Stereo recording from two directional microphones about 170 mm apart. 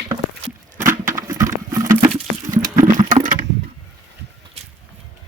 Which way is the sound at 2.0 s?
35° right (ahead or behind).